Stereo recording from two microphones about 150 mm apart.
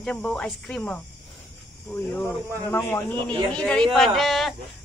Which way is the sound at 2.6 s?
15° left (ahead or behind).